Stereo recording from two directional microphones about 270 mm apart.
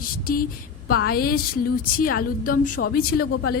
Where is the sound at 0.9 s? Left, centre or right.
Left.